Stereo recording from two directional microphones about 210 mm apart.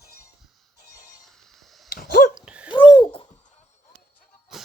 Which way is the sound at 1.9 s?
45° left (ahead or behind).